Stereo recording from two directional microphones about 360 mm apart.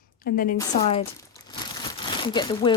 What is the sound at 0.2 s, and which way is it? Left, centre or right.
Speech, left.